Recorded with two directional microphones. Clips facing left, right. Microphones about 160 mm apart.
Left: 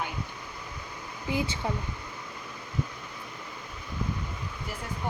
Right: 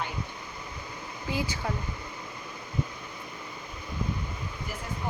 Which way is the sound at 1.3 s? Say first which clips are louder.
Left 2 dB; 20° left (ahead or behind).